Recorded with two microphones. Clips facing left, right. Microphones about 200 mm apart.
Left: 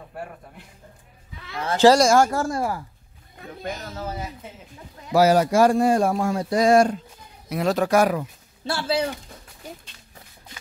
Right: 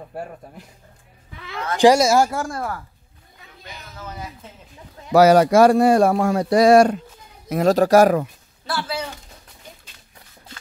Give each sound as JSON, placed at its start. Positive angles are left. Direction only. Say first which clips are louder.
{"t": 1.8, "sound": "speech", "louder": "right 1 dB", "side_deg": -10}
{"t": 2.4, "sound": "speech", "louder": "left 3 dB", "side_deg": 10}
{"t": 3.4, "sound": "speech", "louder": "left 10 dB", "side_deg": 50}
{"t": 5.1, "sound": "speech", "louder": "right 5 dB", "side_deg": -75}
{"t": 7.4, "sound": "speech", "louder": "right 5 dB", "side_deg": -45}
{"t": 8.6, "sound": "speech", "louder": "left 3 dB", "side_deg": 30}